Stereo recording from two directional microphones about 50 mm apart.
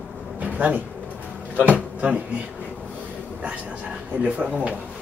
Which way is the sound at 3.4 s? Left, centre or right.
Right.